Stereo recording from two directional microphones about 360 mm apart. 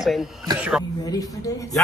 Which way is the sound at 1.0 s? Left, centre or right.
Centre.